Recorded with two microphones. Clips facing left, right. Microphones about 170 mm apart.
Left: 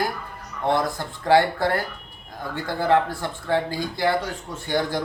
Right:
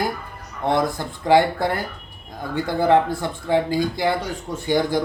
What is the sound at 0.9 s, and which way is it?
Speech, 15° right (ahead or behind).